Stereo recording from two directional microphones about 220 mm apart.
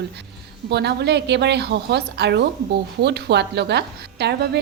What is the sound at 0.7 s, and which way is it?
A woman's voice, 50° right (ahead or behind).